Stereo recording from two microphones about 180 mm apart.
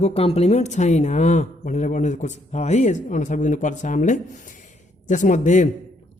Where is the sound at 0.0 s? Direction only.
35° left (ahead or behind).